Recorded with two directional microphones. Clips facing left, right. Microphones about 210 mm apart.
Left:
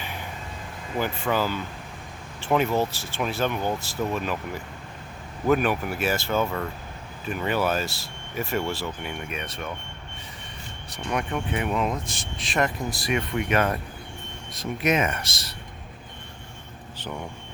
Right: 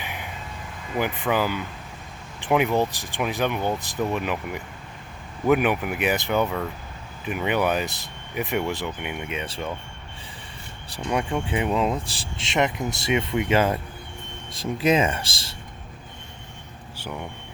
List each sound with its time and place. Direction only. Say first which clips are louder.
0.0 s vehicle: right 1 dB; 15° right (ahead or behind)
0.9 s speech: right 2 dB; 15° right (ahead or behind)
10.8 s speech: right 3 dB; 30° right (ahead or behind)